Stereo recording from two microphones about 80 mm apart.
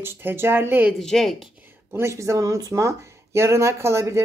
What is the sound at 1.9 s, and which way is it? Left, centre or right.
Speech, right.